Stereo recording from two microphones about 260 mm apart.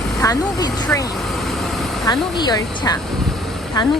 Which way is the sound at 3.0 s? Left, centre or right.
Centre.